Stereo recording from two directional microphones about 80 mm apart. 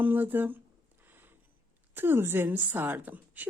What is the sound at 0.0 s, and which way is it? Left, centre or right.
Speech, right.